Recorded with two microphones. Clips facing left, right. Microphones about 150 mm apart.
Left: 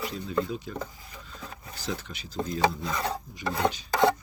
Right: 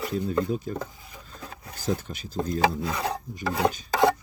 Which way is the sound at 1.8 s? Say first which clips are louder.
Right 6 dB; 45° right (ahead or behind).